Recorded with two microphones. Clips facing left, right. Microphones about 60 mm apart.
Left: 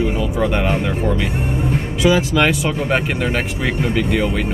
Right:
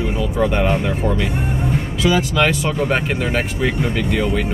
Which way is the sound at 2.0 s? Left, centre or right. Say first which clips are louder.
Left 2 dB; centre.